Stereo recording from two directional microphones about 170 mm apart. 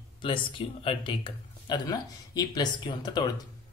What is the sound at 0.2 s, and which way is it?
Speech, 30° left (ahead or behind).